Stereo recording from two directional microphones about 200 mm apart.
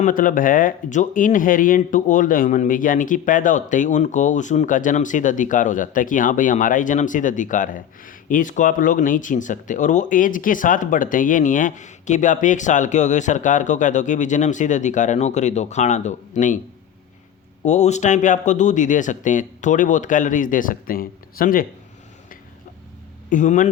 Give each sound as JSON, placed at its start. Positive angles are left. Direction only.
{"t": 0.0, "sound": "speech", "side_deg": 40}
{"t": 17.6, "sound": "speech", "side_deg": 35}
{"t": 23.3, "sound": "speech", "side_deg": 40}